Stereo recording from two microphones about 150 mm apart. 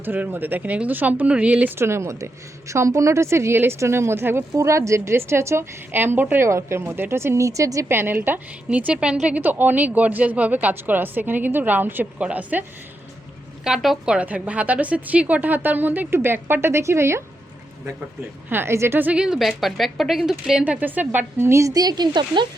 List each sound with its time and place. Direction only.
0.0 s speech: 10° right (ahead or behind)
13.7 s speech: 5° right (ahead or behind)
18.4 s speech: 15° right (ahead or behind); by 22.4 s 30° right (ahead or behind)